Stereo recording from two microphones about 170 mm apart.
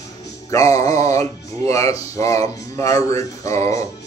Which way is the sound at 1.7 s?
20° left (ahead or behind).